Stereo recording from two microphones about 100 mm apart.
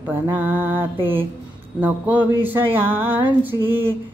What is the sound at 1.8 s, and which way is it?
Speech, 15° right (ahead or behind).